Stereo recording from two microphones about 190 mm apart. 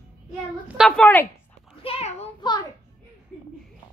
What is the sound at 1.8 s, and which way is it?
Speech, 30° left (ahead or behind).